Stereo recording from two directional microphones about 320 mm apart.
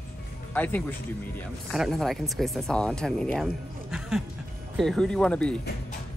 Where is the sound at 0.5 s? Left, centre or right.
Centre.